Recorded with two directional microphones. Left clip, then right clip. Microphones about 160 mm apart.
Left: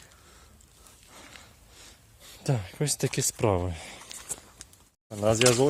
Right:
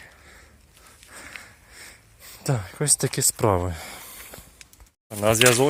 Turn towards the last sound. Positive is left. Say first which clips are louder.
# right 5 dB
turn(degrees=-5)  # may be behind; listen again after turning